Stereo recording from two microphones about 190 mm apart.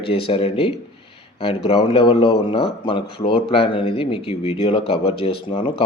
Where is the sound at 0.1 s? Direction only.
30° left (ahead or behind).